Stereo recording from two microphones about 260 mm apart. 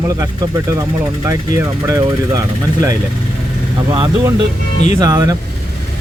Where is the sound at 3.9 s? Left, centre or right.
Centre.